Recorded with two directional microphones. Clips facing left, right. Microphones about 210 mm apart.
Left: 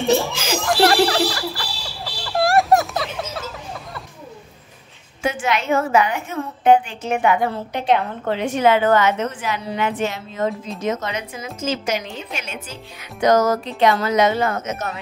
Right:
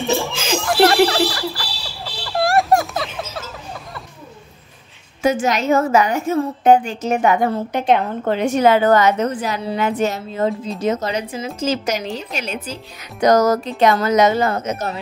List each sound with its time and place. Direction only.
0.4 s chuckle: 10° left (ahead or behind)
1.0 s a sound: centre (ahead or behind)
5.2 s a woman's voice: 40° right (ahead or behind)